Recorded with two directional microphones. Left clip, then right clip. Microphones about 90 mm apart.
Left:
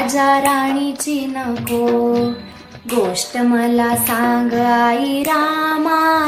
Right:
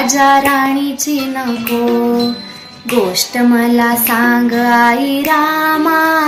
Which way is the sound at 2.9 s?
10° left (ahead or behind).